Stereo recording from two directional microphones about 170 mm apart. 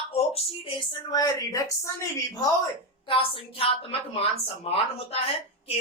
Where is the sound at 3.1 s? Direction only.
30° left (ahead or behind).